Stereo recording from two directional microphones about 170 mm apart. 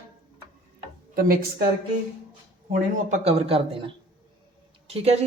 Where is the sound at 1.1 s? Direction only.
60° right (ahead or behind).